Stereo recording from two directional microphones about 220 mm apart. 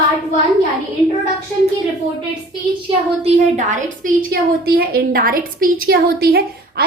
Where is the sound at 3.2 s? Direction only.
35° right (ahead or behind).